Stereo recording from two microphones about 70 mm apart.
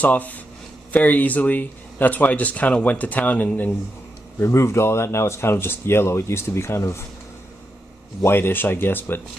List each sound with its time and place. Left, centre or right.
0.0 s speech: left
4.4 s speech: left
8.2 s speech: left